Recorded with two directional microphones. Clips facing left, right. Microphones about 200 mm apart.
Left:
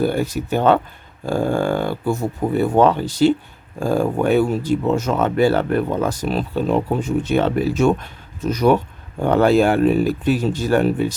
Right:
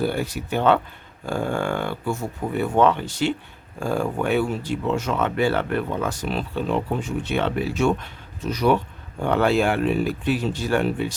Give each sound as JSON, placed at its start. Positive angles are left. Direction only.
{"t": 0.0, "sound": "speech", "side_deg": 45}